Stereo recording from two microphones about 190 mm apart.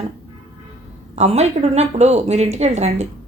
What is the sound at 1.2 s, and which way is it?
A woman's voice, 35° right (ahead or behind).